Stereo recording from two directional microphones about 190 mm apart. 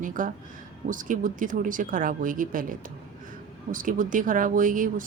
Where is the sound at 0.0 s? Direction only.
45° right (ahead or behind).